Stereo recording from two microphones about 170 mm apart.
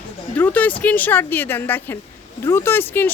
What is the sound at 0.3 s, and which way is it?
Speech, 10° left (ahead or behind).